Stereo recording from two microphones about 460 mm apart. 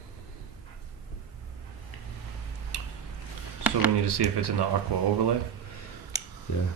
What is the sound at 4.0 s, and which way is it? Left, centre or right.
Speech, right.